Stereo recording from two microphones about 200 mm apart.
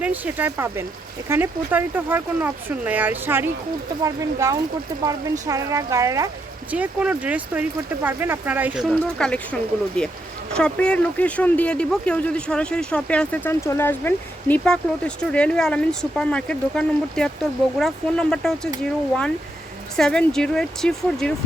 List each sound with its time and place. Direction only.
0.0 s speech: 10° right (ahead or behind)
8.9 s speech: 5° left (ahead or behind)
20.0 s speech: 5° left (ahead or behind)